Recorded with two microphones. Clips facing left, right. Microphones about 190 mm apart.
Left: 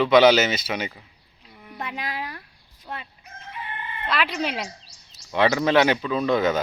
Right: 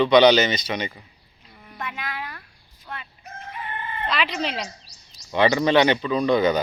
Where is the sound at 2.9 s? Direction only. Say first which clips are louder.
Left 2 dB; 30° left (ahead or behind).